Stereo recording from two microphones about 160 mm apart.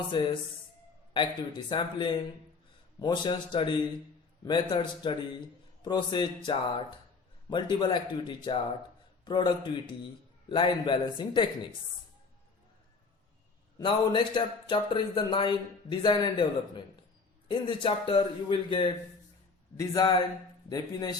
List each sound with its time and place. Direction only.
0.1 s speech: 30° left (ahead or behind)
13.7 s a man's voice: 30° left (ahead or behind)
19.7 s speech: 20° left (ahead or behind)